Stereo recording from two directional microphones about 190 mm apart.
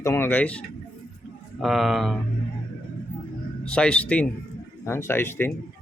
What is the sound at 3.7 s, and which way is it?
A man's voice, 5° left (ahead or behind).